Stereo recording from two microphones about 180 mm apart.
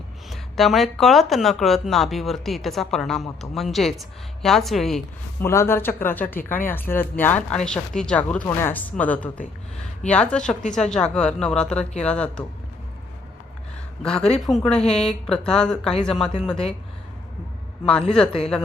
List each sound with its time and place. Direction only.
0.3 s speech: centre (ahead or behind)
5.4 s speech: 15° left (ahead or behind)
10.6 s a woman's voice: 45° left (ahead or behind)
10.8 s speech: 5° left (ahead or behind)
14.0 s speech: 5° left (ahead or behind)
18.1 s speech: 5° left (ahead or behind)